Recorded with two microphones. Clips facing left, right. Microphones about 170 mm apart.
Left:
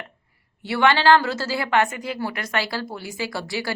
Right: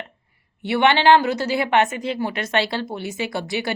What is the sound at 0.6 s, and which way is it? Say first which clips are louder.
A woman's voice: right 2 dB; 20° right (ahead or behind).